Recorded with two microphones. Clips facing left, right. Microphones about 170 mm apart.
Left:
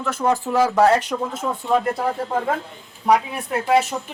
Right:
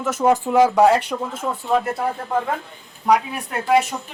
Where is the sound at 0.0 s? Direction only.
20° right (ahead or behind).